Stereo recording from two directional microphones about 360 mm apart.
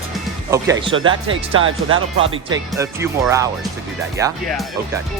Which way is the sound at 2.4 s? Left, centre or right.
Centre.